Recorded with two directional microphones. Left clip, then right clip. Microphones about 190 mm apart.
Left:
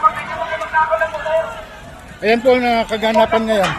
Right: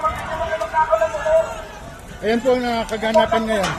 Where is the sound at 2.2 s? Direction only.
35° left (ahead or behind).